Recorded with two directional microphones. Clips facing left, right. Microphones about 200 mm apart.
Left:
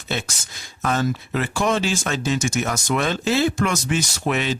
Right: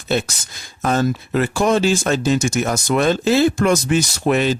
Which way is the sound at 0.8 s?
40° right (ahead or behind).